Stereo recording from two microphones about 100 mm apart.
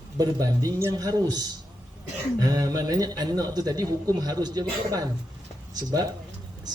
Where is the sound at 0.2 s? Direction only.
40° right (ahead or behind).